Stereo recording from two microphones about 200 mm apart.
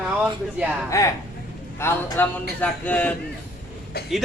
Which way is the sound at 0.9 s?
15° left (ahead or behind).